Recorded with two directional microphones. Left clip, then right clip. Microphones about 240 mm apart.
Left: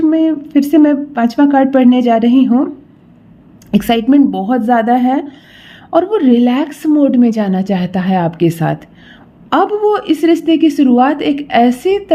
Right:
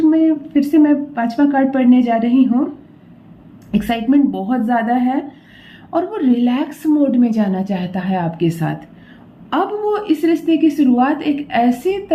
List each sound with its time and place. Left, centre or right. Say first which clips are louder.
0.1 s a woman's voice: left 2 dB; left
3.7 s a woman's voice: left 5 dB; left